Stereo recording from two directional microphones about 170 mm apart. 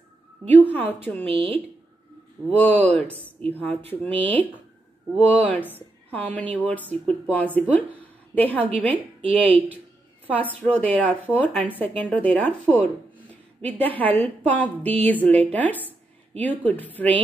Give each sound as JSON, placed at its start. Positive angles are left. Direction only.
{"t": 0.5, "sound": "a woman's voice", "side_deg": 10}
{"t": 2.5, "sound": "a woman's voice", "side_deg": 10}